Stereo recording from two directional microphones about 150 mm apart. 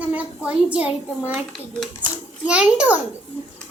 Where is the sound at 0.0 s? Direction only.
10° right (ahead or behind).